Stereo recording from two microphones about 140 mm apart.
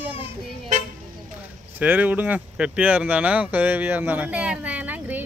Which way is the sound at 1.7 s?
10° right (ahead or behind).